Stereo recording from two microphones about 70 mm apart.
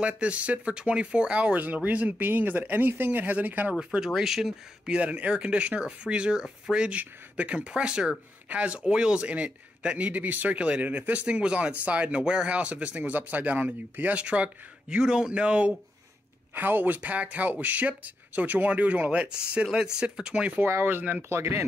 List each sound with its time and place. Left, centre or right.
0.0 s speech: centre
4.0 s speech: centre
4.9 s speech: centre
16.5 s speech: right
20.6 s speech: right
21.3 s speech: right